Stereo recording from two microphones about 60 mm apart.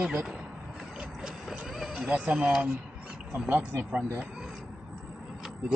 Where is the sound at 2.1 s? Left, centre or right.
Right.